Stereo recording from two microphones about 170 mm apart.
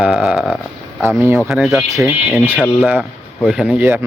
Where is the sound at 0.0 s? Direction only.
5° right (ahead or behind).